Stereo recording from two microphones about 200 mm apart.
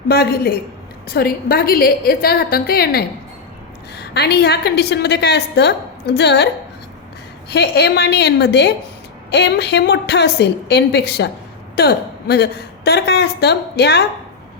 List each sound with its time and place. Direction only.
0.1 s a woman's voice: 50° left (ahead or behind)
7.5 s a woman's voice: 55° left (ahead or behind)